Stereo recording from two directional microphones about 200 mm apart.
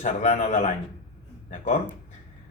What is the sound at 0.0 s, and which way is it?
A man's voice, 35° left (ahead or behind).